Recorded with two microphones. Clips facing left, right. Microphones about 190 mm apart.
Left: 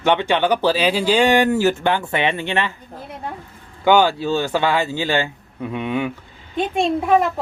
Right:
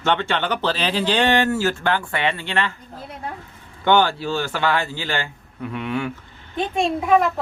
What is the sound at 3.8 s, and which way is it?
Speech, 10° left (ahead or behind).